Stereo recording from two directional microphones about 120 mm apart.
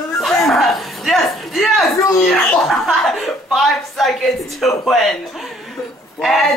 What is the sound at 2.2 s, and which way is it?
Chuckle, centre (ahead or behind).